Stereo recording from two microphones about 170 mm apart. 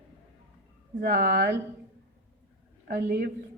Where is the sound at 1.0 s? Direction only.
55° right (ahead or behind).